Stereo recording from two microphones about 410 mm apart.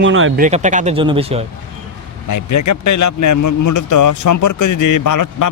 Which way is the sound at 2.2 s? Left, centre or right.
Left.